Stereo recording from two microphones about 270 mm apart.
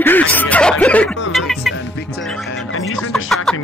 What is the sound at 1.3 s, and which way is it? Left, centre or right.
Music, centre.